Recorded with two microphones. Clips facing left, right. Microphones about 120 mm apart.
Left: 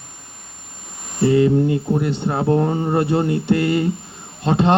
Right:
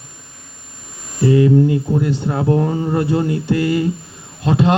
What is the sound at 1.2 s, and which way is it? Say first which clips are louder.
Speech: right 2 dB; 25° left (ahead or behind).